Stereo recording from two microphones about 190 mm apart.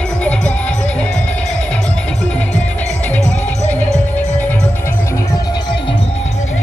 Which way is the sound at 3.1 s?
10° left (ahead or behind).